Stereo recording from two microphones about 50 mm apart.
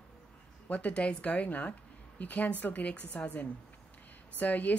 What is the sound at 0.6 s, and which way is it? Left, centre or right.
A woman's voice, left.